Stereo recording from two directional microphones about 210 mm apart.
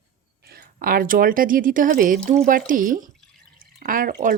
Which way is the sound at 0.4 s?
45° right (ahead or behind).